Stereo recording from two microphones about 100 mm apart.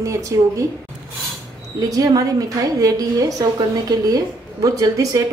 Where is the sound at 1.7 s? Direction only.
35° right (ahead or behind).